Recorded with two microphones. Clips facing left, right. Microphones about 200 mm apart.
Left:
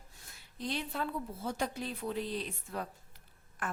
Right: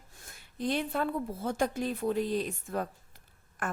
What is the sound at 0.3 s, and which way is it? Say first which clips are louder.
A woman's voice: right 7 dB; 55° right (ahead or behind).